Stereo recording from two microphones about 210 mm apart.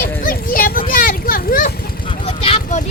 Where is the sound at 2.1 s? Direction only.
30° left (ahead or behind).